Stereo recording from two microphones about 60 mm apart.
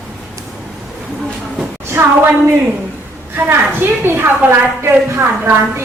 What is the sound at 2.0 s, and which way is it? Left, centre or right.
Speech, right.